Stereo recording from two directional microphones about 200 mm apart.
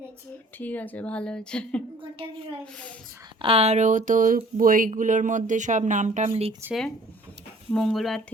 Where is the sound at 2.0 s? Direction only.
25° right (ahead or behind).